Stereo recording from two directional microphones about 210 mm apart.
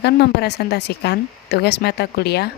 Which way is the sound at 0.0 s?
50° left (ahead or behind).